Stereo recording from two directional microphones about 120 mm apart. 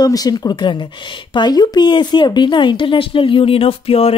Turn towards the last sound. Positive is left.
turn(degrees=55)  # may be behind; listen again after turning